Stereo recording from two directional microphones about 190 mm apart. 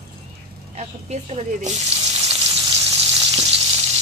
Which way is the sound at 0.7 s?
35° right (ahead or behind).